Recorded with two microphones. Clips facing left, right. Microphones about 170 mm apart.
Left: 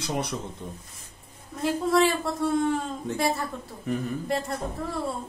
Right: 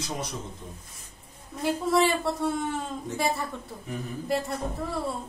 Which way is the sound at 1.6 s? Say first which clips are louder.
Left 1 dB; centre (ahead or behind).